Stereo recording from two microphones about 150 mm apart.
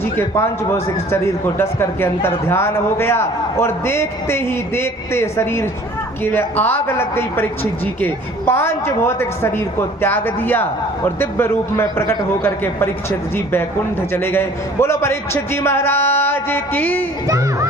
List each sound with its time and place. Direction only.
0.0 s speech: 15° left (ahead or behind)
17.2 s speech: 20° right (ahead or behind)